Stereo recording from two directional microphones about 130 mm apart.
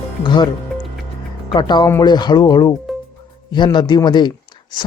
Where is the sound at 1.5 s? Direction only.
35° left (ahead or behind).